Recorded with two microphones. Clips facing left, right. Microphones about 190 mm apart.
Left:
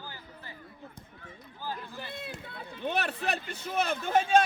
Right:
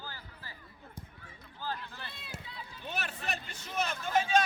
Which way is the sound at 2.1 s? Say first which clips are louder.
Left 7 dB; 55° left (ahead or behind).